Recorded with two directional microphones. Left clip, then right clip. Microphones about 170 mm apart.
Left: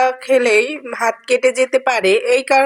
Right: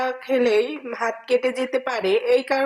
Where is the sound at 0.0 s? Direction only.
30° left (ahead or behind).